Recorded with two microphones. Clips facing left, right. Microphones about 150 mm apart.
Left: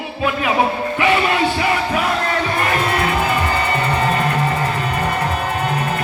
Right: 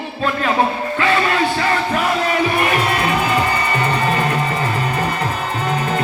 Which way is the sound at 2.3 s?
15° right (ahead or behind).